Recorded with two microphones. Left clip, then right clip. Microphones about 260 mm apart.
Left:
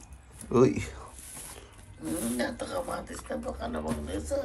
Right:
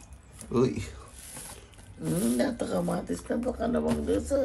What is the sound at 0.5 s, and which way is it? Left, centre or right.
Speech, centre.